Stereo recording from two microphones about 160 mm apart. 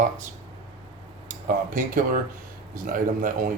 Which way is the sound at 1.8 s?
55° right (ahead or behind).